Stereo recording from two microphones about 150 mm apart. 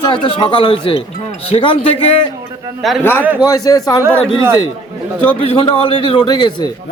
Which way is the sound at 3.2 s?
10° right (ahead or behind).